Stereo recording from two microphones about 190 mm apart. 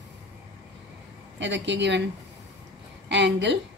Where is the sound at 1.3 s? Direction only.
70° right (ahead or behind).